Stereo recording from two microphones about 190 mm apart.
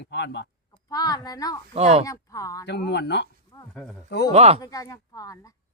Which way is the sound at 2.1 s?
15° left (ahead or behind).